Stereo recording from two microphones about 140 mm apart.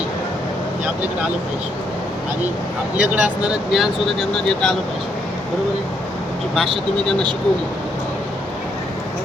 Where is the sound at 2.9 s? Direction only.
10° right (ahead or behind).